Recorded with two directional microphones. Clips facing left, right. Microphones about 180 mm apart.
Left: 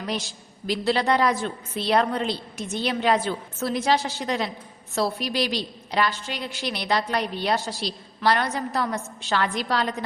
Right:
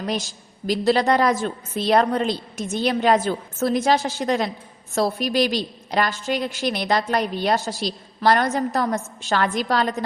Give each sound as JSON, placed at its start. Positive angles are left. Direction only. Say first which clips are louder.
{"t": 0.0, "sound": "a woman's voice", "louder": "right 3 dB", "side_deg": -45}